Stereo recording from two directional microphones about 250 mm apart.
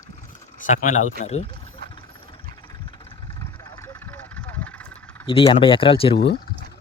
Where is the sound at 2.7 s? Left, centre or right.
Centre.